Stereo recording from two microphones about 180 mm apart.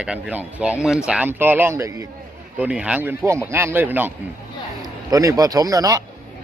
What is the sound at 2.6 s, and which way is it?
A man's voice, 5° right (ahead or behind).